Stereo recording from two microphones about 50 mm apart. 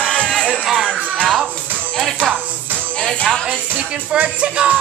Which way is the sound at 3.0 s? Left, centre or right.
Centre.